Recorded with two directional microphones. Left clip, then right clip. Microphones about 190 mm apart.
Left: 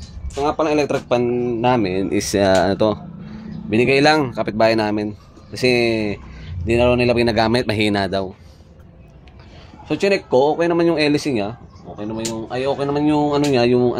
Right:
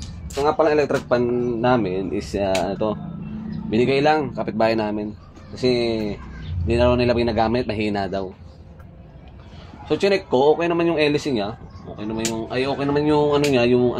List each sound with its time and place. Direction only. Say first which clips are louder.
0.4 s speech: even; 45° left (ahead or behind); by 3.0 s 90° left
3.7 s speech: left 3 dB; 65° left (ahead or behind)
4.3 s speech: left 4 dB; 40° left (ahead or behind)
5.6 s speech: left 4 dB; 70° left (ahead or behind)
6.8 s speech: left 2 dB; 60° left (ahead or behind)
9.8 s speech: left 1 dB; 60° left (ahead or behind)
12.0 s speech: even; 50° left (ahead or behind)